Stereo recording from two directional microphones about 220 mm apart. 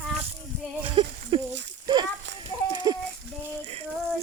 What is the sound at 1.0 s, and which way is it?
Speech, 25° right (ahead or behind).